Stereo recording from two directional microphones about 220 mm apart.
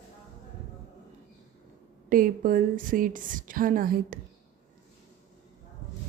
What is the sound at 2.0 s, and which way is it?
A woman's voice, 40° right (ahead or behind).